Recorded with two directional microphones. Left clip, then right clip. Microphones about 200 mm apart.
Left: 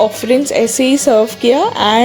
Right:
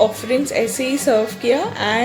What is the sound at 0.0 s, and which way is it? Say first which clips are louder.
A woman's voice: left 5 dB; 35° left (ahead or behind).